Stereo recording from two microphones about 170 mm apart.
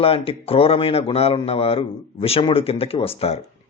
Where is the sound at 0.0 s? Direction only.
35° left (ahead or behind).